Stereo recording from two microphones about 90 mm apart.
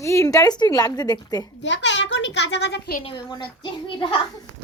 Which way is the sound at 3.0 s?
65° left (ahead or behind).